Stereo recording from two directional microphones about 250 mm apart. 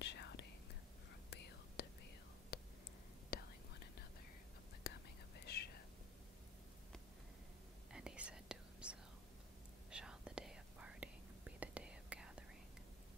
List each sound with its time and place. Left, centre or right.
0.0 s whispering: left
1.8 s whispering: left
2.5 s a sound: left
3.3 s whispering: left
5.4 s whispering: left
7.9 s whispering: centre